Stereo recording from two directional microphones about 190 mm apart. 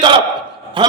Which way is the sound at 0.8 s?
25° right (ahead or behind).